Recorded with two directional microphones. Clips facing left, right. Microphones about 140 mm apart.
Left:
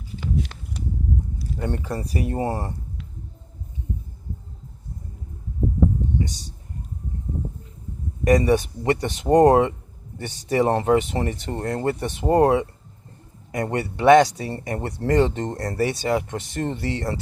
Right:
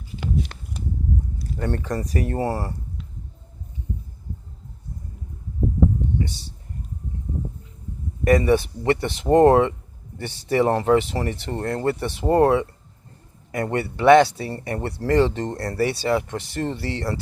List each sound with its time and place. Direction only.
1.5 s speech: 15° left (ahead or behind)
6.1 s a sound: 15° left (ahead or behind)
8.2 s speech: 20° left (ahead or behind)